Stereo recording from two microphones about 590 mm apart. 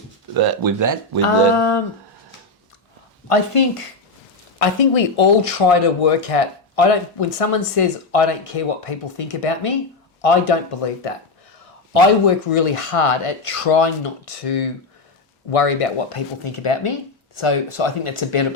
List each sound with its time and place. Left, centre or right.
0.3 s speech: right
1.2 s speech: left
3.2 s speech: left
4.6 s speech: left